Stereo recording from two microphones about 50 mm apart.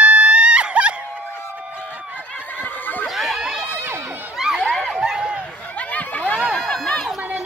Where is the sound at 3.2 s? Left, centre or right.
Centre.